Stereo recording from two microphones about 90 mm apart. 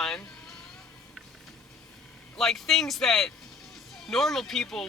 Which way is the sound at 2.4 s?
5° left (ahead or behind).